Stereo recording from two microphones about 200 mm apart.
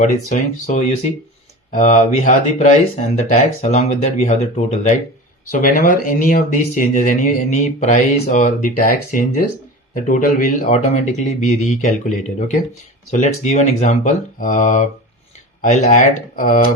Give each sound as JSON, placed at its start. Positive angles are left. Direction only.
{"t": 0.0, "sound": "speech", "side_deg": 35}